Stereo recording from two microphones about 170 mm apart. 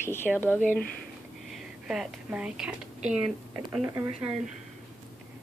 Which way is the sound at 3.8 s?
15° right (ahead or behind).